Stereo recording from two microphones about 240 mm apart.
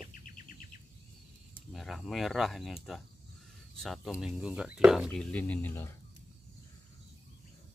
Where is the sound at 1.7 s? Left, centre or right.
Centre.